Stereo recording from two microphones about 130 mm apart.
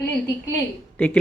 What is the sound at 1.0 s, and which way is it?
Speech, 15° left (ahead or behind).